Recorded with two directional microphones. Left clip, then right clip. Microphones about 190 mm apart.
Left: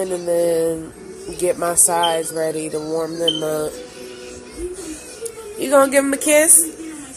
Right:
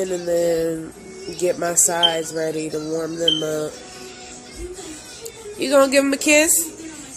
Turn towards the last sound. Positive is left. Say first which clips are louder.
# left 1 dB
turn(degrees=-35)  # may be behind; listen again after turning